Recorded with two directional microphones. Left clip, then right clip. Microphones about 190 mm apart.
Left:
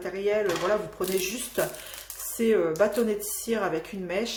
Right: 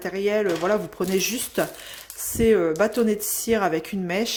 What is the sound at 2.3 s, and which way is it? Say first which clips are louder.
Speech: right 4 dB; 45° right (ahead or behind).